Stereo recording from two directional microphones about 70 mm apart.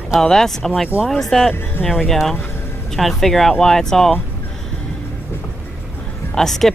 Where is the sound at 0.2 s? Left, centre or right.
Centre.